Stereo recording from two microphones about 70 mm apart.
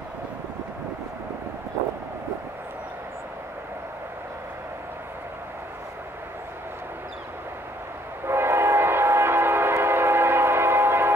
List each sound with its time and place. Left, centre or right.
8.3 s train: right